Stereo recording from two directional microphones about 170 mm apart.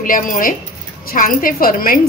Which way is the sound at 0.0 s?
55° left (ahead or behind).